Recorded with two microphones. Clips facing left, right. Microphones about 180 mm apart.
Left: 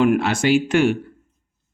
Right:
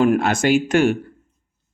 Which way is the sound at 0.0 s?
45° right (ahead or behind).